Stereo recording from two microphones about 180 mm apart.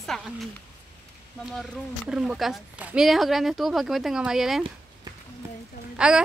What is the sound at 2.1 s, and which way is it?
Speech, 5° right (ahead or behind).